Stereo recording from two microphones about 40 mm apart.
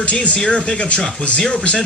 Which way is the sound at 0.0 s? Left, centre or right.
Left.